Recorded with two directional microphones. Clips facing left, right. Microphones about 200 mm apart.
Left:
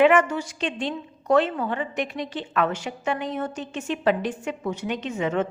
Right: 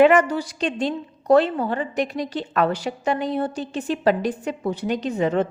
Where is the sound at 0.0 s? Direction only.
40° right (ahead or behind).